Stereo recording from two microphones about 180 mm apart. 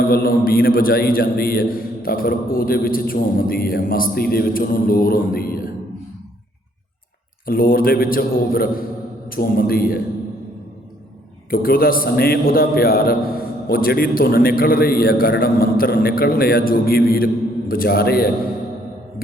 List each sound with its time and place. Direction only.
0.0 s a man's voice: 55° left (ahead or behind)
7.4 s a man's voice: 55° left (ahead or behind)
11.5 s a man's voice: 55° left (ahead or behind)